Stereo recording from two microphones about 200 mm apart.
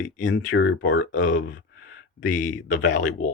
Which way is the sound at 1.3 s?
40° left (ahead or behind).